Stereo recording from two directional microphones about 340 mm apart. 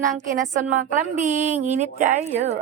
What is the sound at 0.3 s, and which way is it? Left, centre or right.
A woman's voice, right.